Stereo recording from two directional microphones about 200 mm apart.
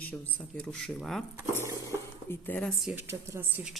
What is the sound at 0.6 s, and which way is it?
A woman's voice, 5° left (ahead or behind).